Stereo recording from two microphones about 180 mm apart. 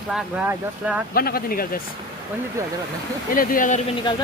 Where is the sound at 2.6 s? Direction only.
15° right (ahead or behind).